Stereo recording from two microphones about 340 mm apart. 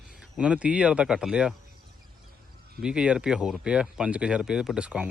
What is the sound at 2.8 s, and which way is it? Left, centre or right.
Speech, centre.